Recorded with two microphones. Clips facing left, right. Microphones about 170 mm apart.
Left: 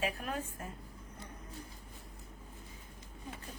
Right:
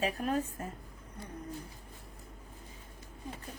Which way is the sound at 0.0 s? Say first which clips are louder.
Right 5 dB; 40° right (ahead or behind).